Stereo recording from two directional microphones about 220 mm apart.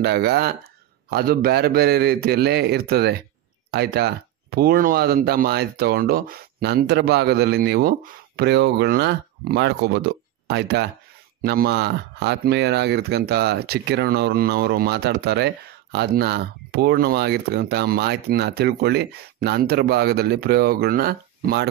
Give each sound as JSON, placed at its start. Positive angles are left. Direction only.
{"t": 0.0, "sound": "speech", "side_deg": -50}